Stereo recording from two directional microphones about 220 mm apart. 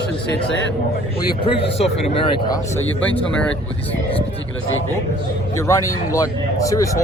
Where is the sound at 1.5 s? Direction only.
25° left (ahead or behind).